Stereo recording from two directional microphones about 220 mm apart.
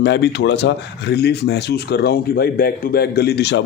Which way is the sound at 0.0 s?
50° left (ahead or behind).